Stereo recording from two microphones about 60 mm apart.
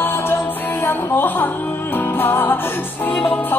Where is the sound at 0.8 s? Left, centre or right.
Left.